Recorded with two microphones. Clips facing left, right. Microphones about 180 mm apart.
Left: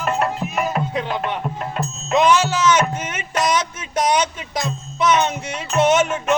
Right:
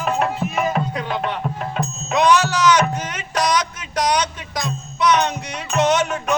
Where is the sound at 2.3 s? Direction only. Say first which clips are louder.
Even; 25° left (ahead or behind).